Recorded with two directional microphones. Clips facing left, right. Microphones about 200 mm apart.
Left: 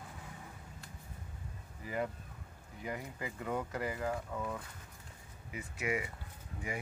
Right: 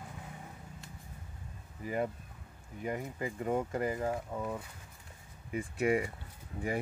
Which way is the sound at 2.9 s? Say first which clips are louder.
Right 5 dB; 35° right (ahead or behind).